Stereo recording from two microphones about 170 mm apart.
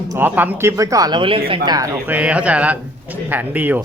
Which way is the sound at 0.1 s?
10° right (ahead or behind).